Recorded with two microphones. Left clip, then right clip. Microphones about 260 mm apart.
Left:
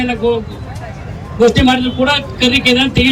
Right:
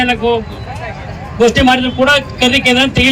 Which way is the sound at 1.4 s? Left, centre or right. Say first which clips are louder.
Right 1 dB; centre.